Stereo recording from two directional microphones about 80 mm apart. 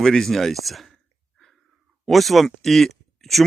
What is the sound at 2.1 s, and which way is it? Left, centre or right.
Speech, centre.